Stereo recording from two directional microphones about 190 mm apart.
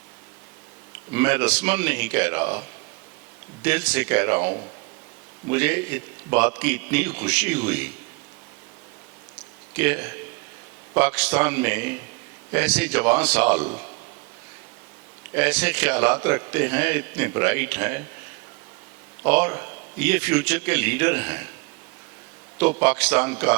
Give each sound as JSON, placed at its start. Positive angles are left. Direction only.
{"t": 1.1, "sound": "a man's voice", "side_deg": -10}
{"t": 3.6, "sound": "a man's voice", "side_deg": -10}
{"t": 9.7, "sound": "a man's voice", "side_deg": -10}
{"t": 15.4, "sound": "a man's voice", "side_deg": -10}
{"t": 19.2, "sound": "a man's voice", "side_deg": -10}
{"t": 22.8, "sound": "a man's voice", "side_deg": -10}